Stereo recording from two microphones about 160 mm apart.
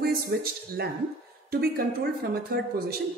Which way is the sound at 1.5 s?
70° right (ahead or behind).